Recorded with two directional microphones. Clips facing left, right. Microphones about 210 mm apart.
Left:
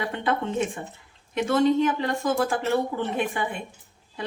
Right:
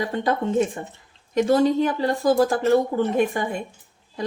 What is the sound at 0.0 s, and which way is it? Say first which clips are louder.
Speech: right 3 dB; 40° right (ahead or behind).